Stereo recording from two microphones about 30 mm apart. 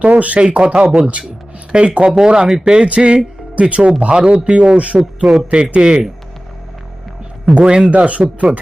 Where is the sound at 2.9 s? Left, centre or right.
Right.